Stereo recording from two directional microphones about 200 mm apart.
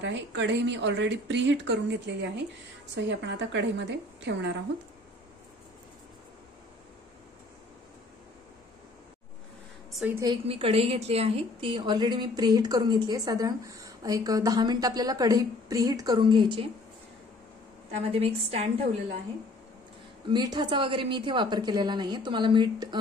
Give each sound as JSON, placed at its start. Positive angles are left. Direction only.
{"t": 0.0, "sound": "speech", "side_deg": -65}
{"t": 9.9, "sound": "a woman's voice", "side_deg": -10}
{"t": 10.2, "sound": "a woman's voice", "side_deg": -25}
{"t": 17.9, "sound": "a woman's voice", "side_deg": -30}
{"t": 20.2, "sound": "a woman's voice", "side_deg": -20}